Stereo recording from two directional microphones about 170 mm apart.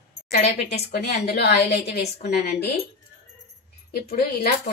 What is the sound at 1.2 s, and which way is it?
A woman's voice, 70° left (ahead or behind).